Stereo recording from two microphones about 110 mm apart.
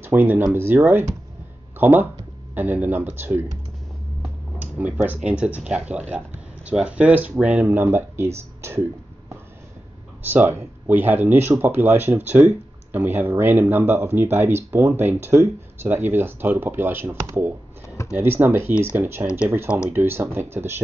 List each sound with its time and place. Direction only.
0.0 s a sound: 15° right (ahead or behind)
0.5 s speech: 20° right (ahead or behind)
4.6 s speech: 15° right (ahead or behind)
10.2 s speech: 15° right (ahead or behind)
17.8 s computer keyboard: 25° left (ahead or behind)
18.1 s speech: 20° right (ahead or behind)